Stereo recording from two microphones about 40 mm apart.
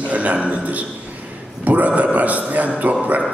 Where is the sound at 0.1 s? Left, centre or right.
Right.